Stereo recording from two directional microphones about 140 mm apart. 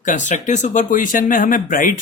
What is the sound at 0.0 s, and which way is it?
Speech, 65° left (ahead or behind).